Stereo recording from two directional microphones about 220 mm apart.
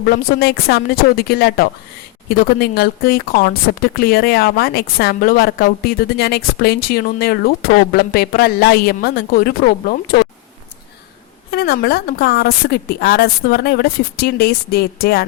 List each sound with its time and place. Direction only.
0.0 s speech: 45° left (ahead or behind)
11.5 s speech: 45° left (ahead or behind)